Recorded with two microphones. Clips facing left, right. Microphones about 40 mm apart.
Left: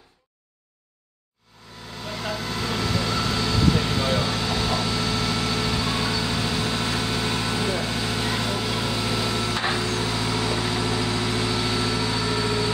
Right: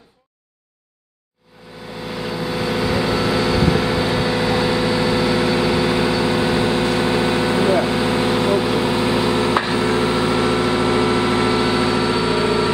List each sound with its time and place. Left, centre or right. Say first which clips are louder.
2.2 s vehicle: right 6 dB; centre